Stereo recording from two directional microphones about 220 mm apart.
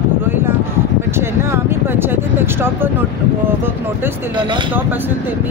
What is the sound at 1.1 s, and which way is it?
Speech, 10° right (ahead or behind).